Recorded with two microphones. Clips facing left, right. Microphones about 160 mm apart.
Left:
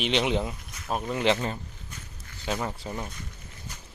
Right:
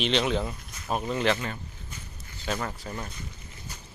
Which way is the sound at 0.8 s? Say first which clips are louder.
Right 1 dB; centre (ahead or behind).